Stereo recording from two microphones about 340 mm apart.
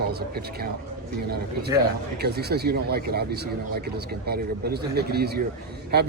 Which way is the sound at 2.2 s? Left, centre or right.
Right.